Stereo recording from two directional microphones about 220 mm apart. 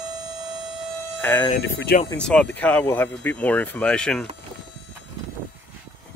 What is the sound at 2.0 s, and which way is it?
Speech, 5° left (ahead or behind).